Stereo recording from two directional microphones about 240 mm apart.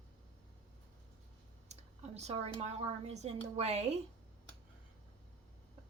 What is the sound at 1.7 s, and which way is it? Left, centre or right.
Speech, right.